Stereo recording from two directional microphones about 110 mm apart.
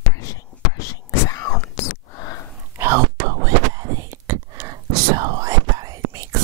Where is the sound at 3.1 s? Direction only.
35° right (ahead or behind).